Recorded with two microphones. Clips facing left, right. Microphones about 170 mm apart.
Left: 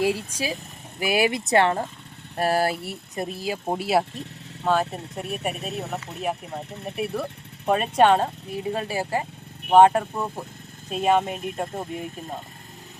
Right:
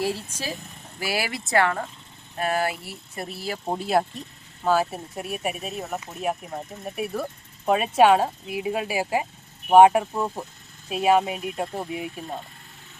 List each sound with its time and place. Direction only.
0.0 s speech: 15° left (ahead or behind); by 2.7 s 35° left (ahead or behind)
3.2 s speech: 15° left (ahead or behind); by 12.2 s 5° right (ahead or behind)